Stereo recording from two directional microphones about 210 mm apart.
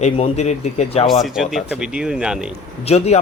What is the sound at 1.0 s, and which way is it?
Speech, centre (ahead or behind).